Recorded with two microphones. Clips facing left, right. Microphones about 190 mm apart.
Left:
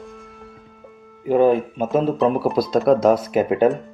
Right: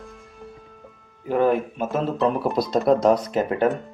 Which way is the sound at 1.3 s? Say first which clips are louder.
Left 4 dB; 15° left (ahead or behind).